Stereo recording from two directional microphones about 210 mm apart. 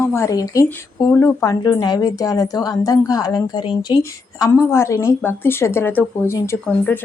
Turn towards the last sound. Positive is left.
turn(degrees=10)  # may be behind; listen again after turning